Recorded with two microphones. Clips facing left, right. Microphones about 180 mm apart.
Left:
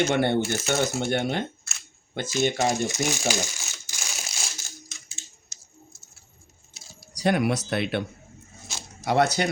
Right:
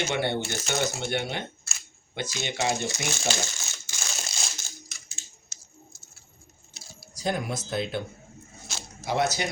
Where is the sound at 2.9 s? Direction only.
15° left (ahead or behind).